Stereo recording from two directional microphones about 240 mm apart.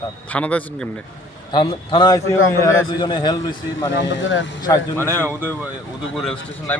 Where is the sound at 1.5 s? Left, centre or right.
Centre.